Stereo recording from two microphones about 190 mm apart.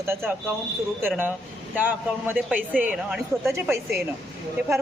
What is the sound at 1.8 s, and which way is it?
A woman's voice, 10° right (ahead or behind).